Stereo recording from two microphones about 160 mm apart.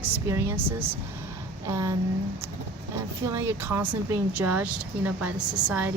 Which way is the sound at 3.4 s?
15° right (ahead or behind).